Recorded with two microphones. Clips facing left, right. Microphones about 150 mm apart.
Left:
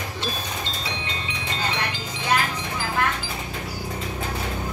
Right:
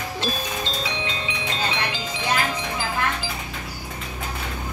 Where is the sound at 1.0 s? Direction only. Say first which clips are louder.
Right 3 dB; 90° right.